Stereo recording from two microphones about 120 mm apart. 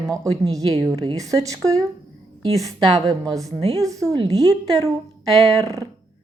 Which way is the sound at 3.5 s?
60° right (ahead or behind).